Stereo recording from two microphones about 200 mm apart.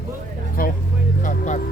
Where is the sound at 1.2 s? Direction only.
40° left (ahead or behind).